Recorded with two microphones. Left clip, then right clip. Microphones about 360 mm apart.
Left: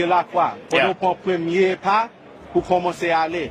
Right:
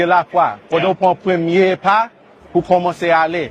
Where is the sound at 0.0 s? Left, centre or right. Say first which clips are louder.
Right 5 dB; right.